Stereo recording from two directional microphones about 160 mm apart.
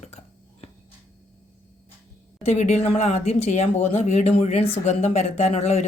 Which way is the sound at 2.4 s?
45° left (ahead or behind).